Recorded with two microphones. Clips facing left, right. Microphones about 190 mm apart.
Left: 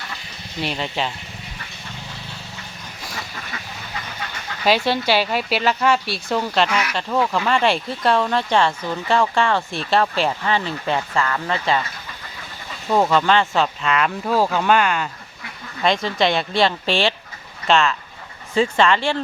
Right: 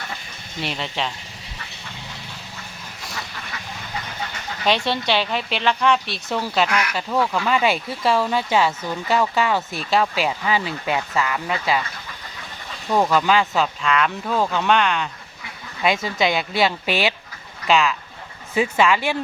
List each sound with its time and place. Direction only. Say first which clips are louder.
0.6 s speech: left 2 dB; centre (ahead or behind)
4.6 s speech: left 3 dB; 5° left (ahead or behind)
12.9 s speech: left 1 dB; centre (ahead or behind)
15.8 s speech: left 2 dB; 5° right (ahead or behind)